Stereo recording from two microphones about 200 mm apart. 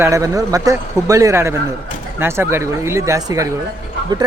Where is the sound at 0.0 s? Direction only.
15° right (ahead or behind).